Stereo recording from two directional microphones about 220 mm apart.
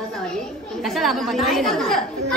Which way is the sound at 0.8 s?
Centre (ahead or behind).